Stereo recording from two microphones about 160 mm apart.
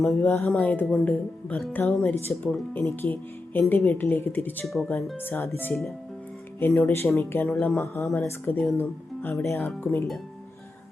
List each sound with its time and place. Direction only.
0.0 s speech: centre (ahead or behind)
0.3 s speech: 15° left (ahead or behind)
4.6 s speech: centre (ahead or behind)
5.2 s speech: 15° left (ahead or behind)